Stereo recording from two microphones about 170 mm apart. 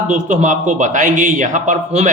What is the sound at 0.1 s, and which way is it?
A man's voice, 45° right (ahead or behind).